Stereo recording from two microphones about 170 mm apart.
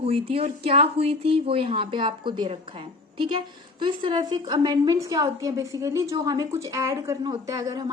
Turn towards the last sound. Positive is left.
turn(degrees=-20)  # may be behind; listen again after turning